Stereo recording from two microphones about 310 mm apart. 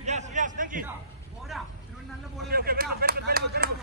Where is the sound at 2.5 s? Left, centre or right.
Right.